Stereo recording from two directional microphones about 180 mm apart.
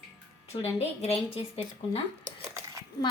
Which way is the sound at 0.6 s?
35° left (ahead or behind).